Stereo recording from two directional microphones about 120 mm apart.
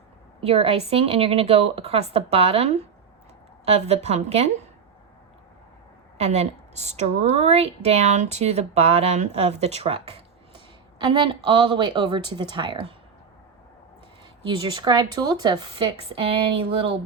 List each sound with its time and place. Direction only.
0.4 s a woman's voice: 55° right (ahead or behind)
6.1 s a woman's voice: 65° right (ahead or behind)
11.0 s speech: 40° right (ahead or behind)
14.4 s speech: 45° right (ahead or behind)
16.2 s speech: 50° right (ahead or behind)